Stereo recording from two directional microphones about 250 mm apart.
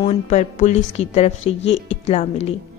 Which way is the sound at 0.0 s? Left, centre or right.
Left.